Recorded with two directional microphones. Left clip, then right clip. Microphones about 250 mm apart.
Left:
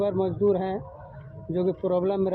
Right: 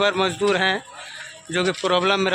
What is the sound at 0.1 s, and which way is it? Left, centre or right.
Speech, right.